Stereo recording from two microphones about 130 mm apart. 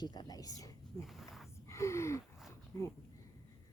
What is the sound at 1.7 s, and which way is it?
Gasp, 20° left (ahead or behind).